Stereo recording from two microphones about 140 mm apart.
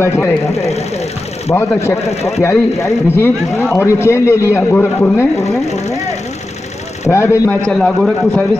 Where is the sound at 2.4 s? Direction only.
20° left (ahead or behind).